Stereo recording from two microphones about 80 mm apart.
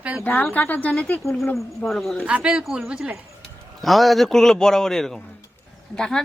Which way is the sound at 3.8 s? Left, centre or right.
Centre.